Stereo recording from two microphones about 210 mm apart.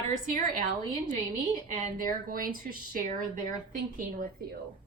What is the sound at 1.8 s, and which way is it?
Speech, 40° right (ahead or behind).